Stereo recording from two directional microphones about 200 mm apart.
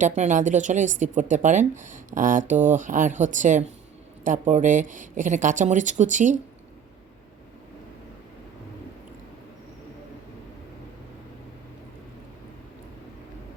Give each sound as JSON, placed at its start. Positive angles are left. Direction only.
{"t": 0.2, "sound": "a woman's voice", "side_deg": -40}